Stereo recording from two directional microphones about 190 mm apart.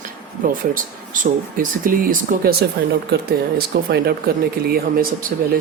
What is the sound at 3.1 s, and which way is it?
Speech, 55° right (ahead or behind).